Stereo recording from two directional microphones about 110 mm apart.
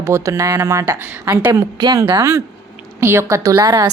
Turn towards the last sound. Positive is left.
turn(degrees=-30)  # may be behind; listen again after turning